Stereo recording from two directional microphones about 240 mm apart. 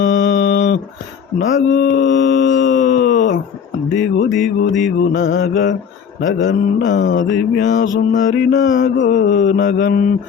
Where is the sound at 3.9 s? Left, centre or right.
Left.